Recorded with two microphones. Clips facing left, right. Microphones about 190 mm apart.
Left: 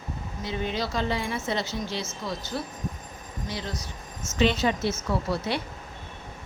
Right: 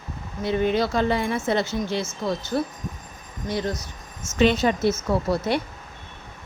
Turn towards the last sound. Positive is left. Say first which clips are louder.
# right 5 dB
turn(degrees=-45)  # may be behind; listen again after turning